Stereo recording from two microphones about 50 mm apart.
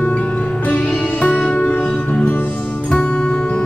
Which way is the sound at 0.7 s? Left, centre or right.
Left.